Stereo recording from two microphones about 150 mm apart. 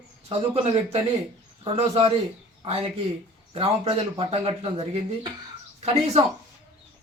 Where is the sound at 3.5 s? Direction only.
40° right (ahead or behind).